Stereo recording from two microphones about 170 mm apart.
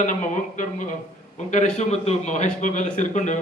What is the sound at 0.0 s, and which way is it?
A man's voice, 50° left (ahead or behind).